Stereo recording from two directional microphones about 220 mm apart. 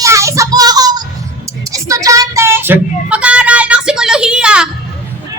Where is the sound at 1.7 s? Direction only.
15° right (ahead or behind).